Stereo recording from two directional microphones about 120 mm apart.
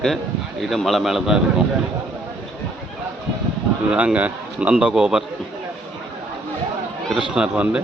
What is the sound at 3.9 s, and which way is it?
A man's voice, 10° right (ahead or behind).